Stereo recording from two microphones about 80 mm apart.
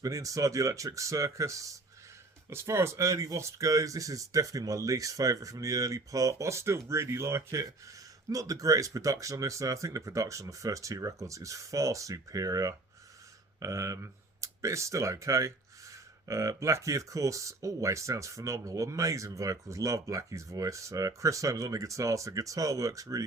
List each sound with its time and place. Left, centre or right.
0.0 s speech: right